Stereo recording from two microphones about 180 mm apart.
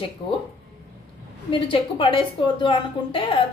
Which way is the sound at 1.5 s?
30° left (ahead or behind).